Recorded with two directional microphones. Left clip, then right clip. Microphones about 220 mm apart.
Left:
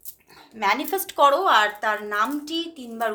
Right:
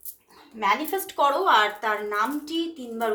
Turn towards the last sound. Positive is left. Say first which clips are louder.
# even
turn(degrees=25)  # may be behind; listen again after turning